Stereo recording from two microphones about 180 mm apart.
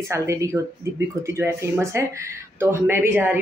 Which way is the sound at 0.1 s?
15° right (ahead or behind).